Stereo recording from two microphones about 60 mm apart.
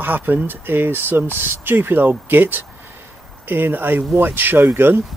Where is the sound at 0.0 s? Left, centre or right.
Right.